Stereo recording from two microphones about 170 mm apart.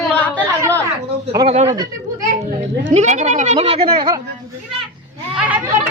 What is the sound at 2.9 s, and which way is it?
Speech, 40° right (ahead or behind).